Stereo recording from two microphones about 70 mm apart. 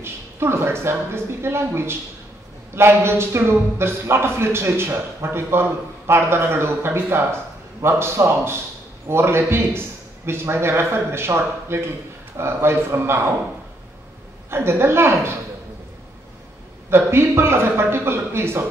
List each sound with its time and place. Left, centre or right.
0.0 s a man's voice: right
14.5 s a man's voice: right
16.9 s a man's voice: right